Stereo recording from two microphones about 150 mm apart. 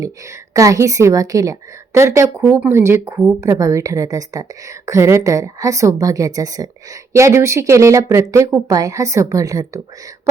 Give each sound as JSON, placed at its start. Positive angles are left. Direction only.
{"t": 0.5, "sound": "a woman's voice", "side_deg": -20}